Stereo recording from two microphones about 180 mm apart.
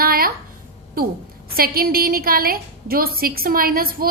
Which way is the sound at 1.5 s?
55° right (ahead or behind).